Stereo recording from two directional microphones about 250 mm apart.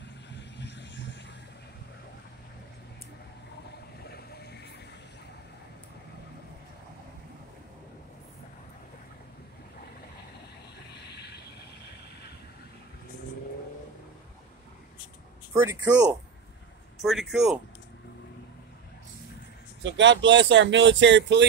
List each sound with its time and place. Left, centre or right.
0.3 s vehicle: left
4.1 s vehicle: left
11.1 s vehicle: left
15.5 s speech: centre
19.8 s speech: right